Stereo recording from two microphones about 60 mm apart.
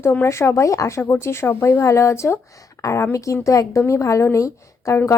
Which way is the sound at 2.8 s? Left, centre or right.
Left.